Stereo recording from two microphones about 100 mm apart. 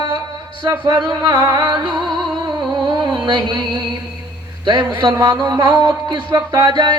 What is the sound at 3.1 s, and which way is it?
A man's voice, 50° right (ahead or behind).